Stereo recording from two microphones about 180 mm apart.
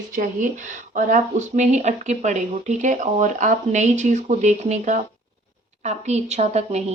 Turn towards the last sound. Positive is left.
turn(degrees=-40)  # may be behind; listen again after turning